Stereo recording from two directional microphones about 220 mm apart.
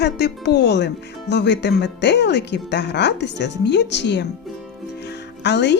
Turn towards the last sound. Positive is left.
turn(degrees=50)  # may be behind; listen again after turning